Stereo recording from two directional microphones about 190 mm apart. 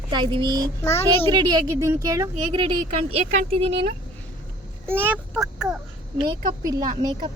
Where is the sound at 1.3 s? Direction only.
25° right (ahead or behind).